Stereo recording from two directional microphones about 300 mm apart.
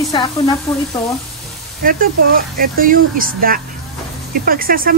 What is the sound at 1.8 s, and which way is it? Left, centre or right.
Speech, right.